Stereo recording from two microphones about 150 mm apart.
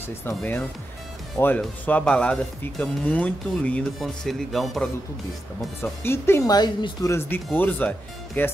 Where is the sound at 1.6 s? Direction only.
10° left (ahead or behind).